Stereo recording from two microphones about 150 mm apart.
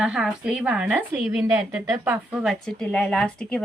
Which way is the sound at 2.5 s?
5° left (ahead or behind).